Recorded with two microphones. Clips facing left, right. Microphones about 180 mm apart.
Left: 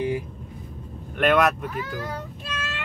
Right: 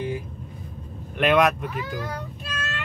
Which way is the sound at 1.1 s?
Centre (ahead or behind).